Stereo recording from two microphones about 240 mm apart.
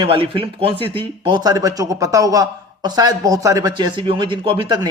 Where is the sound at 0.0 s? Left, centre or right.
Right.